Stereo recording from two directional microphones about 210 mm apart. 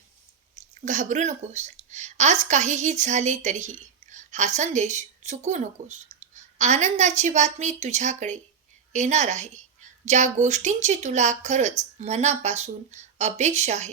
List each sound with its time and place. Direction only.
0.9 s a woman's voice: 35° right (ahead or behind)